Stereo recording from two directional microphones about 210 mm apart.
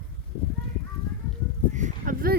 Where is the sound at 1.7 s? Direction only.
35° right (ahead or behind).